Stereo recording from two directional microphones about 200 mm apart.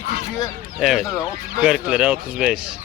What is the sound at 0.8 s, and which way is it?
Speech, centre (ahead or behind).